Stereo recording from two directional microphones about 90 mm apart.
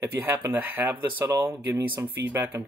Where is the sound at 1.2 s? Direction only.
35° right (ahead or behind).